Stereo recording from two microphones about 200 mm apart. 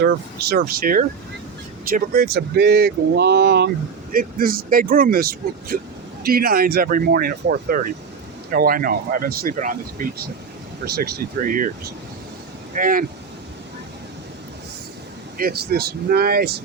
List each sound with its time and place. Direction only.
0.0 s speech: 50° right (ahead or behind)
12.7 s speech: 45° right (ahead or behind)
15.4 s speech: 50° right (ahead or behind)